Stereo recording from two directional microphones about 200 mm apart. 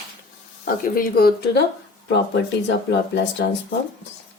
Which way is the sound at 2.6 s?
60° left (ahead or behind).